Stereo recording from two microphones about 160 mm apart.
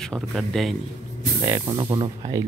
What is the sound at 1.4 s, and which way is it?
Speech, 20° right (ahead or behind).